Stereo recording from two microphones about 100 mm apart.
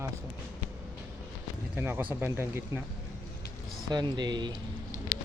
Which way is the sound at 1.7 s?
20° right (ahead or behind).